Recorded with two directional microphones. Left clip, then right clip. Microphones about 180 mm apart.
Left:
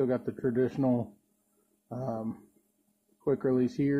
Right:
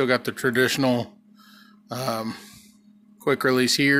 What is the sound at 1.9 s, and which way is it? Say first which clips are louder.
Speech: right 9 dB; 55° right (ahead or behind).